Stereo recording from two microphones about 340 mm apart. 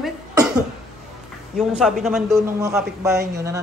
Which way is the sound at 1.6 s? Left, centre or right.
Centre.